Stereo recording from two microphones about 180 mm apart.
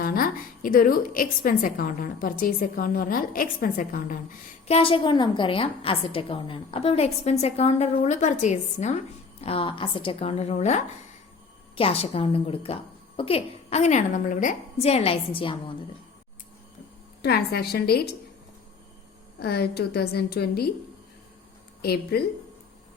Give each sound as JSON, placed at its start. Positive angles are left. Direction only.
{"t": 0.0, "sound": "a woman's voice", "side_deg": 50}
{"t": 4.7, "sound": "a woman's voice", "side_deg": 30}
{"t": 17.2, "sound": "a woman's voice", "side_deg": 60}
{"t": 19.4, "sound": "a woman's voice", "side_deg": 60}
{"t": 21.8, "sound": "speech", "side_deg": 60}